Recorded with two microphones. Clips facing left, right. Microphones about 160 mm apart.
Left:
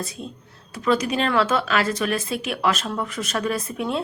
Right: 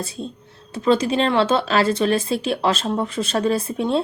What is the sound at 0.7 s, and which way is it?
A woman's voice, 30° right (ahead or behind).